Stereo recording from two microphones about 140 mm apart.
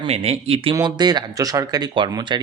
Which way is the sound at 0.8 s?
30° right (ahead or behind).